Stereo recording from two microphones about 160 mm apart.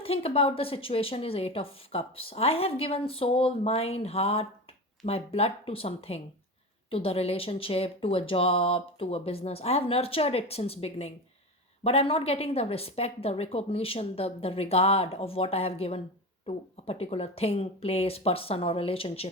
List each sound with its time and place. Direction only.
0.0 s speech: 40° left (ahead or behind)